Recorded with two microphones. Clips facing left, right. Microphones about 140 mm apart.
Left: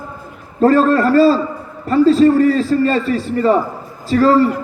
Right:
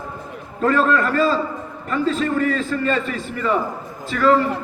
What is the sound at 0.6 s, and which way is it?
A man's voice, 35° left (ahead or behind).